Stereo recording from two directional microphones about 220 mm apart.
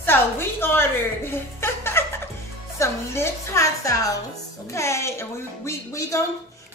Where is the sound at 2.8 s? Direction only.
10° left (ahead or behind).